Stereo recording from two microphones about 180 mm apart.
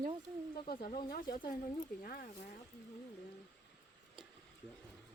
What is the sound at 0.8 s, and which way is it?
Speech, 55° left (ahead or behind).